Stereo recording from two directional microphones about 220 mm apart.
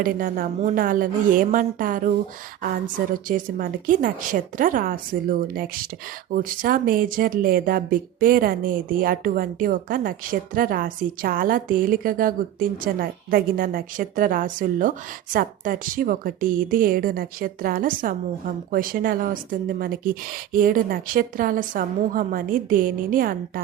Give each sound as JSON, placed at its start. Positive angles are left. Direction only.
{"t": 0.0, "sound": "speech", "side_deg": -40}